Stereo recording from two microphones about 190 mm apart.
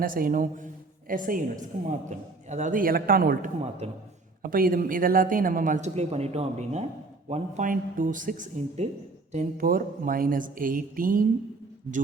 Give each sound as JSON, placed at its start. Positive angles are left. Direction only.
{"t": 0.0, "sound": "a woman's voice", "side_deg": -45}
{"t": 3.8, "sound": "a man's voice", "side_deg": -35}
{"t": 4.4, "sound": "a woman's voice", "side_deg": -50}